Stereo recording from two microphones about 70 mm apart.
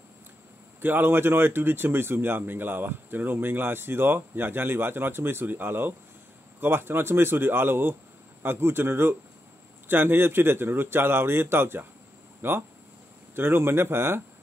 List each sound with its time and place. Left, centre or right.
0.7 s speech: right